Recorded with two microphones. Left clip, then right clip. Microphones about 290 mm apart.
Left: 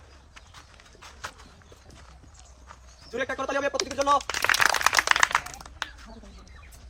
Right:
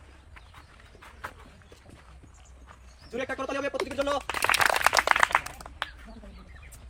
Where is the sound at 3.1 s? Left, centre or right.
Centre.